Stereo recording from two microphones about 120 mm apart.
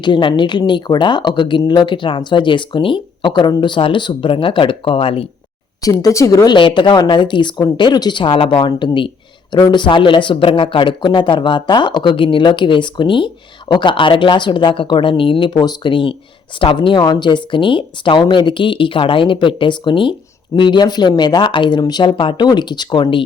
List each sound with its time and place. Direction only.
0.0 s a woman's voice: 40° left (ahead or behind)
5.8 s a woman's voice: 30° left (ahead or behind)